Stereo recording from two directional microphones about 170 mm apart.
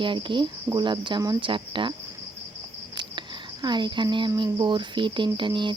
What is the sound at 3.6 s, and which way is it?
Speech, 25° right (ahead or behind).